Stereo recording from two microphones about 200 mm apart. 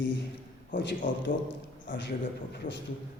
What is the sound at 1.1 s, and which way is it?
Speech, 65° left (ahead or behind).